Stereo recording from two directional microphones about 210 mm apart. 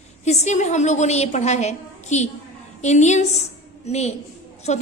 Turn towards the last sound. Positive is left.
turn(degrees=35)  # may be behind; listen again after turning